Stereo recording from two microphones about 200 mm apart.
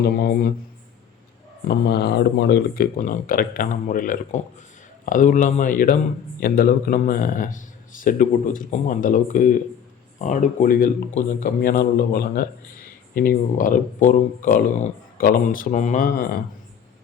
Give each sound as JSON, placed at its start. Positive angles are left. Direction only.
{"t": 0.0, "sound": "speech", "side_deg": 50}
{"t": 1.6, "sound": "speech", "side_deg": 50}